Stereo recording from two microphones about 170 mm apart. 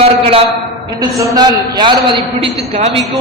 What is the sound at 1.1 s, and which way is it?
A man's voice, 20° right (ahead or behind).